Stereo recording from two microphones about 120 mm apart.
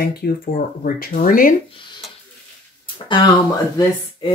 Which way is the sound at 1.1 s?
90° left.